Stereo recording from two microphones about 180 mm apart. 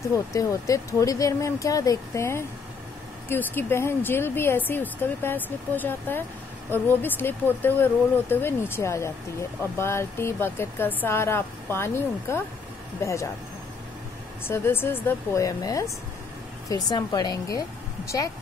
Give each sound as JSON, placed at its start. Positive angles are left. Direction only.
{"t": 0.1, "sound": "speech", "side_deg": 15}
{"t": 14.4, "sound": "a woman's voice", "side_deg": 15}